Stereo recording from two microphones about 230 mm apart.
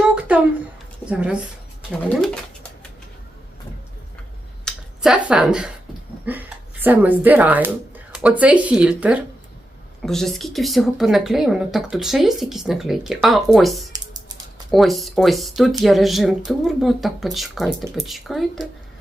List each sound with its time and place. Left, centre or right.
0.0 s a sound: centre
1.1 s speech: centre
4.6 s finger snapping: centre
6.3 s speech: centre
13.9 s typing: centre
14.7 s speech: centre